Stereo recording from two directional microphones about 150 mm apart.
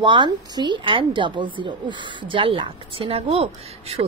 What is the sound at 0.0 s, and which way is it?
A woman's voice, 30° right (ahead or behind).